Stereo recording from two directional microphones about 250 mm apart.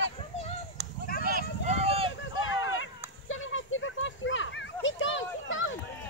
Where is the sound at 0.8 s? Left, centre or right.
Right.